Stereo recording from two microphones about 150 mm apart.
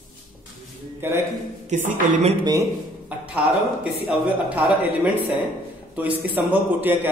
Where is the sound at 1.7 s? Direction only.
55° right (ahead or behind).